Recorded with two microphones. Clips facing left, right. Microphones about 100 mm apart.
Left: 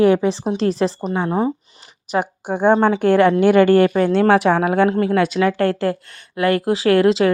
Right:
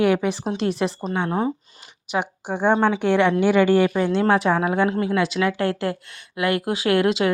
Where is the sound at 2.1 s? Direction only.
45° left (ahead or behind); by 4.9 s 65° left (ahead or behind).